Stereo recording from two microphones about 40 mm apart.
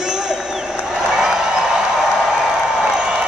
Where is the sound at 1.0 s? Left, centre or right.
Centre.